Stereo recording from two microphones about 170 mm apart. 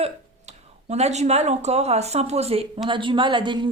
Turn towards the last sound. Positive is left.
turn(degrees=-25)  # may be behind; listen again after turning